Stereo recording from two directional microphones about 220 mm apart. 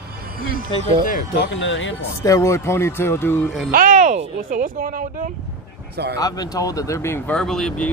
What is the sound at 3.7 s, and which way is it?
Speech, 40° right (ahead or behind).